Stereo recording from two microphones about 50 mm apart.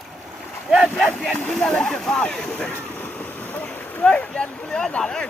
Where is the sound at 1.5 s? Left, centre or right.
Centre.